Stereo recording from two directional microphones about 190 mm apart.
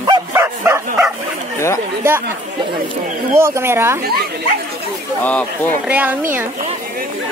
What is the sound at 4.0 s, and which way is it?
Speech, 55° right (ahead or behind).